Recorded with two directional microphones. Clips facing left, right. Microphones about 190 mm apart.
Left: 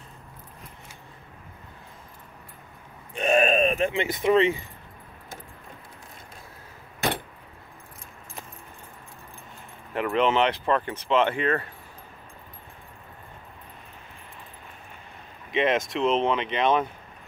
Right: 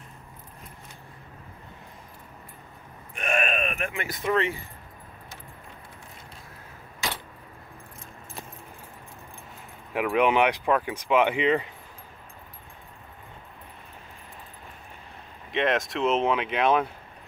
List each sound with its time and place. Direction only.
3.2 s speech: 30° left (ahead or behind)
9.9 s speech: 10° right (ahead or behind)
15.5 s speech: centre (ahead or behind)